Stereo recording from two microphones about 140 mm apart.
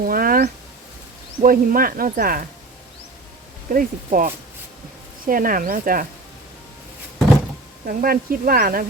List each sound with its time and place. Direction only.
0.0 s a sound: 90° right
1.5 s speech: 90° right
3.7 s speech: 75° right (ahead or behind)
7.9 s speech: 90° right